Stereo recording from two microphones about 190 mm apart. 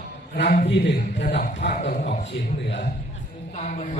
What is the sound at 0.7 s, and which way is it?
Speech, 65° left (ahead or behind).